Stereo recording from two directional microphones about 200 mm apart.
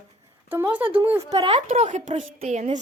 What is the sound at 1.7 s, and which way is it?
A woman's voice, 35° right (ahead or behind).